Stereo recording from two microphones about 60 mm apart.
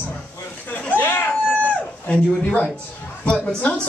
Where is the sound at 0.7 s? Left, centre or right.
Left.